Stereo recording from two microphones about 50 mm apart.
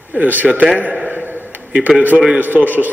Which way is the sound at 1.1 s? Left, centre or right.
Right.